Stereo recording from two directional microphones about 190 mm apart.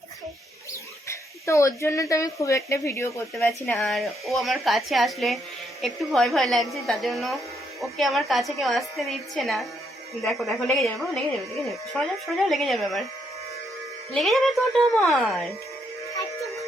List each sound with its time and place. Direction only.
1.0 s speech: 15° left (ahead or behind)
3.8 s a woman's voice: centre (ahead or behind)
14.1 s a woman's voice: centre (ahead or behind)